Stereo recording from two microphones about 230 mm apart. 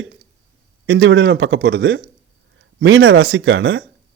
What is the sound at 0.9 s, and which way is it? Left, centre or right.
Speech, right.